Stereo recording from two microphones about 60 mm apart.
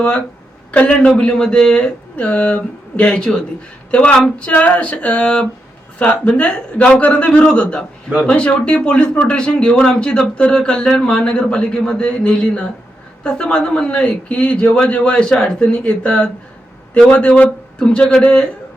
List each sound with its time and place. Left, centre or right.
0.7 s a man's voice: left